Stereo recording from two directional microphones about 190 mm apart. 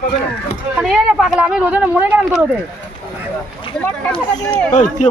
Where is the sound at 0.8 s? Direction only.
Centre (ahead or behind).